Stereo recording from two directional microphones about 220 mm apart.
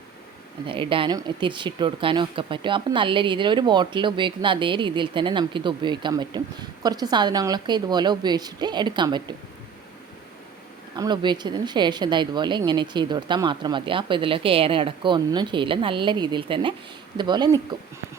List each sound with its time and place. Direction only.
0.7 s speech: 25° right (ahead or behind)
10.9 s speech: 20° right (ahead or behind)